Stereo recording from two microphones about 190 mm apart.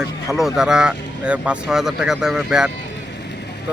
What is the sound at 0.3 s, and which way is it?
Speech, centre (ahead or behind).